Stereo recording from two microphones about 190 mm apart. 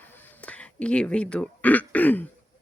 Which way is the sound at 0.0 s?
10° left (ahead or behind).